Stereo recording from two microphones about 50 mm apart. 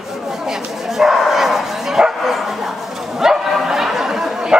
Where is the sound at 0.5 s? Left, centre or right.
Centre.